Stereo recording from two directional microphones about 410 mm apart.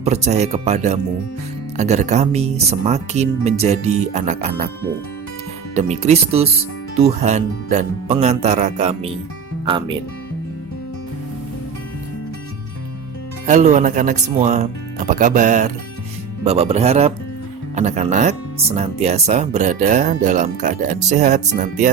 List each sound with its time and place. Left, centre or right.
0.0 s speech: centre
5.7 s speech: centre
13.5 s speech: centre